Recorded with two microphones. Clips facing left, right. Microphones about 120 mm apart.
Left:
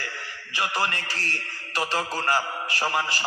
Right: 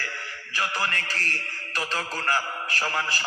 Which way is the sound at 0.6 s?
20° left (ahead or behind).